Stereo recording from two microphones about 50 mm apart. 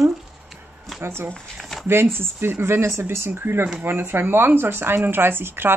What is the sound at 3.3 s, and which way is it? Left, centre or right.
Speech, right.